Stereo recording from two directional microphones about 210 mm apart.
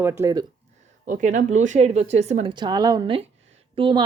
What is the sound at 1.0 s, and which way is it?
Speech, 35° right (ahead or behind).